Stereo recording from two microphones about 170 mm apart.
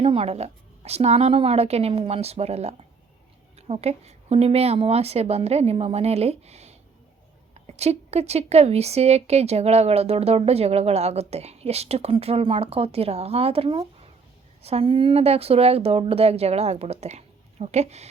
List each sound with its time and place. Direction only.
0.0 s a woman's voice: 35° right (ahead or behind)